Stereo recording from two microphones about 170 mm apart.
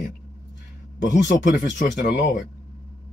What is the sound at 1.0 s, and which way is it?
Speech, 90° left.